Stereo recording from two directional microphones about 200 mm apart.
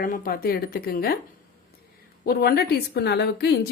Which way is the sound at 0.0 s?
45° left (ahead or behind).